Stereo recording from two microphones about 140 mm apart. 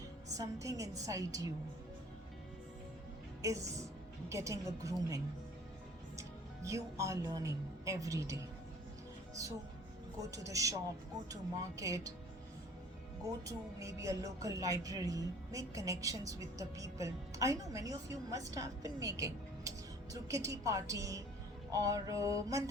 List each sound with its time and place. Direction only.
0.3 s a woman's voice: 25° right (ahead or behind)
3.4 s a woman's voice: 20° right (ahead or behind)
10.2 s a woman's voice: 25° right (ahead or behind)
11.8 s a woman's voice: 25° right (ahead or behind)
13.2 s a woman's voice: 25° right (ahead or behind)